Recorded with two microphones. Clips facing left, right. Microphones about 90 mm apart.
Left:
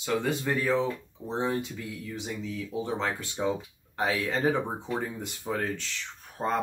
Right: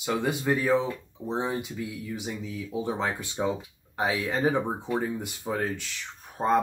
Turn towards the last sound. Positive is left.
turn(degrees=-15)  # may be behind; listen again after turning